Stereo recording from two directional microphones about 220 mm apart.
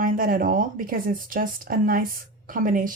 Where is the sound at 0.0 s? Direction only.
40° right (ahead or behind).